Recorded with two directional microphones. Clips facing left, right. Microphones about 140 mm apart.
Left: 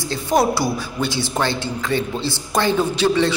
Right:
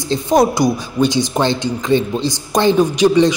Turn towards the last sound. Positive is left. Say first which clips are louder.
# right 6 dB
turn(degrees=-15)  # may be behind; listen again after turning